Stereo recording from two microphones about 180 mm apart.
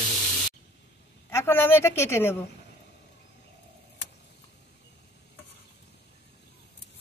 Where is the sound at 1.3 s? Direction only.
15° left (ahead or behind).